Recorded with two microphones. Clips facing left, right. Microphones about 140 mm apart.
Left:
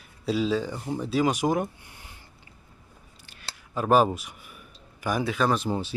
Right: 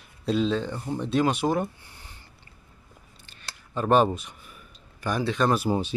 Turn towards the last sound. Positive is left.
turn(degrees=-10)  # may be behind; listen again after turning